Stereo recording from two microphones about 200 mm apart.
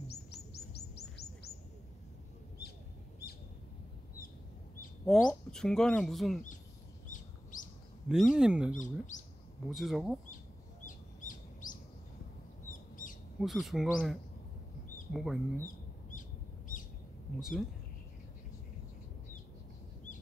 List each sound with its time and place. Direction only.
0.1 s bird: 55° left (ahead or behind)
5.0 s speech: centre (ahead or behind)
8.1 s speech: 5° right (ahead or behind)
8.7 s speech: 40° left (ahead or behind)
9.7 s speech: centre (ahead or behind)
10.9 s bird: 40° left (ahead or behind)
13.4 s speech: centre (ahead or behind)
15.1 s speech: centre (ahead or behind)
15.6 s bird: 40° left (ahead or behind)
17.4 s speech: centre (ahead or behind)